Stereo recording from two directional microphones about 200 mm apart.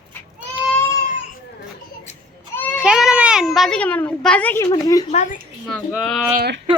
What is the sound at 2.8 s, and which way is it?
Speech, 5° right (ahead or behind).